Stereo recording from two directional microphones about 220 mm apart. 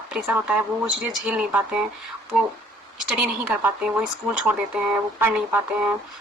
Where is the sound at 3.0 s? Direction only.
5° right (ahead or behind).